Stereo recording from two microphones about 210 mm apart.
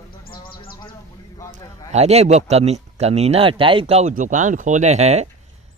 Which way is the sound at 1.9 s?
30° right (ahead or behind).